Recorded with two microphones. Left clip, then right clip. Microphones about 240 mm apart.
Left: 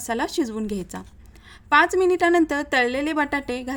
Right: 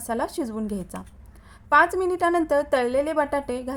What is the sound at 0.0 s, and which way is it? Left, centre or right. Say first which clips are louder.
A woman's voice: left 2 dB; left.